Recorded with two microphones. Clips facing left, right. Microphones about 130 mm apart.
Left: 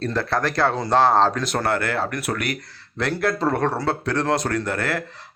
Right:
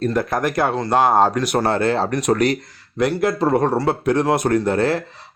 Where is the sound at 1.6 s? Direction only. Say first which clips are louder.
Right 3 dB; 25° right (ahead or behind).